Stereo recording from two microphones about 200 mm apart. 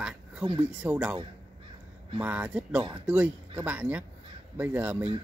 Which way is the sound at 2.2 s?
10° right (ahead or behind).